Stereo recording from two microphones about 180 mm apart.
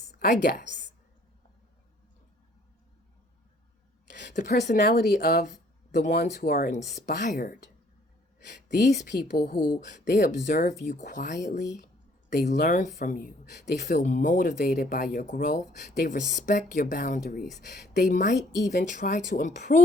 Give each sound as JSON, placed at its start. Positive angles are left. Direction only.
{"t": 0.2, "sound": "speech", "side_deg": 55}
{"t": 4.4, "sound": "speech", "side_deg": 45}
{"t": 4.9, "sound": "speech", "side_deg": 60}
{"t": 8.8, "sound": "speech", "side_deg": 40}
{"t": 9.4, "sound": "speech", "side_deg": 60}
{"t": 10.0, "sound": "speech", "side_deg": 45}
{"t": 18.0, "sound": "speech", "side_deg": 45}